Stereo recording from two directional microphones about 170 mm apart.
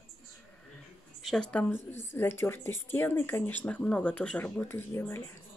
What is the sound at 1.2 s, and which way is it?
Speech, 5° left (ahead or behind).